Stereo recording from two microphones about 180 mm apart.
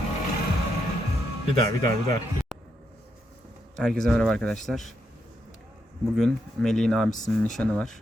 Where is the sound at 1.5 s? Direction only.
20° left (ahead or behind).